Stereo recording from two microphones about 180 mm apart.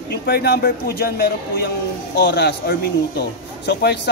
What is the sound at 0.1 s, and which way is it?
Speech, 60° left (ahead or behind).